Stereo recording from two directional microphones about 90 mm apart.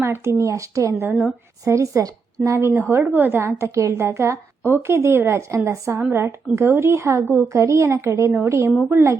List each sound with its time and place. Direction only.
0.0 s a woman's voice: 25° right (ahead or behind)